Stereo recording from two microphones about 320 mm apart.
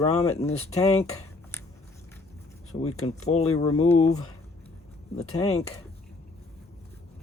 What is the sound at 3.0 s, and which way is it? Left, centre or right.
Speech, centre.